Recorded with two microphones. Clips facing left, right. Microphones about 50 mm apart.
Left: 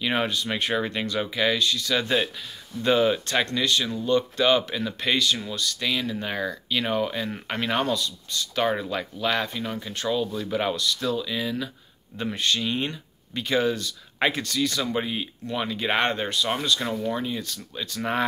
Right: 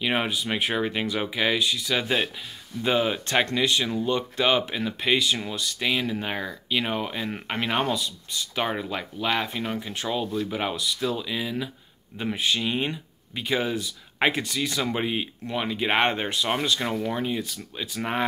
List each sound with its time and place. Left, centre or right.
0.0 s speech: centre
3.3 s speech: right; by 9.5 s centre
9.5 s speech: right
10.2 s speech: centre